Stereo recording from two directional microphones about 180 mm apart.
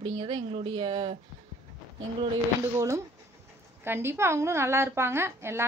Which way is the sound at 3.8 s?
10° right (ahead or behind).